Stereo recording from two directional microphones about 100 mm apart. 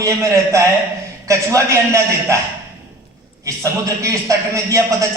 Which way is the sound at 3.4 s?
30° right (ahead or behind).